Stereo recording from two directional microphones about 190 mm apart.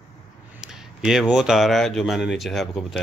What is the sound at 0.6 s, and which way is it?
Speech, 5° right (ahead or behind).